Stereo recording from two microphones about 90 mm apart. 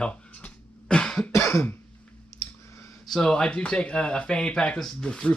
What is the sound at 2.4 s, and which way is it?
Clicking, 35° left (ahead or behind).